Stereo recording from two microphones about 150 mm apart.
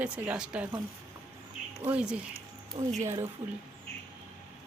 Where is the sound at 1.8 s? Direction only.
10° right (ahead or behind).